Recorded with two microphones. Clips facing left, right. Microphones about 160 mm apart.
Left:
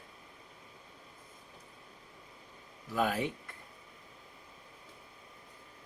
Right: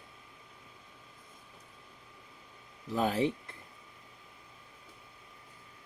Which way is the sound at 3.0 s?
30° right (ahead or behind).